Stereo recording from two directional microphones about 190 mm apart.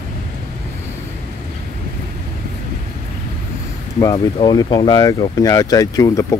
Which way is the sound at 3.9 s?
20° left (ahead or behind).